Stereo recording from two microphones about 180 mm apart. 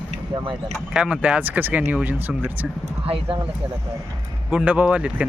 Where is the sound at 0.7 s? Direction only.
5° right (ahead or behind).